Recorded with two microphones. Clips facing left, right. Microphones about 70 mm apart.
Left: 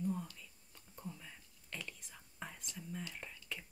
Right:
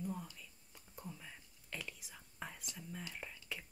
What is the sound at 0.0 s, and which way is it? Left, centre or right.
Whispering, centre.